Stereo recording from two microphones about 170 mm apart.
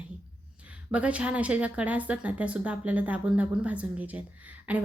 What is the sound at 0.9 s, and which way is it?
A woman's voice, 5° right (ahead or behind).